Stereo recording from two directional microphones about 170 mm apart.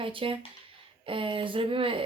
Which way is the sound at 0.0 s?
30° right (ahead or behind).